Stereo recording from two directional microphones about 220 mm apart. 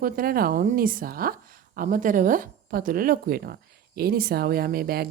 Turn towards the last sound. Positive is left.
turn(degrees=-45)  # may be behind; listen again after turning